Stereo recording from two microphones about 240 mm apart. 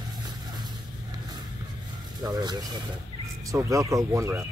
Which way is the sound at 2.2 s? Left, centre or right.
Centre.